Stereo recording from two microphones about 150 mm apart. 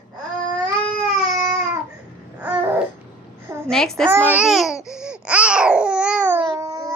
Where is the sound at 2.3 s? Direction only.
10° right (ahead or behind).